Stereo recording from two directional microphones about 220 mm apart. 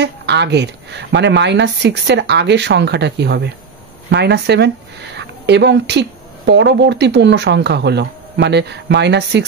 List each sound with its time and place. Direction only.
0.0 s speech: 50° right (ahead or behind)